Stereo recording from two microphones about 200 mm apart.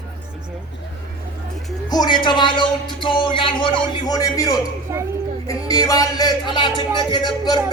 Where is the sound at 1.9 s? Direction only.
20° left (ahead or behind).